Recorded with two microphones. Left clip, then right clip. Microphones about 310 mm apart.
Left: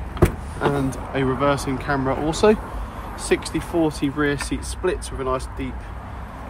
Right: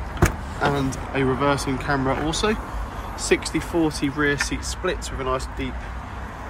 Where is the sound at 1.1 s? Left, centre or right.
Centre.